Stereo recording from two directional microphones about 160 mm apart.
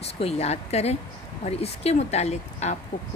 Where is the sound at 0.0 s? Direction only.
40° left (ahead or behind).